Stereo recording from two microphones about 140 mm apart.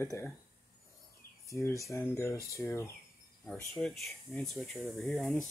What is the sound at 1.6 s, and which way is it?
Speech, 20° left (ahead or behind).